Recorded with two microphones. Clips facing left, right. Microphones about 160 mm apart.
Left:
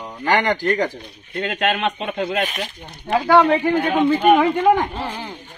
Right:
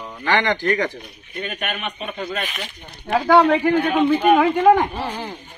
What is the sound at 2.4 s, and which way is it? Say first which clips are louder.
Speech: left 5 dB; 40° left (ahead or behind).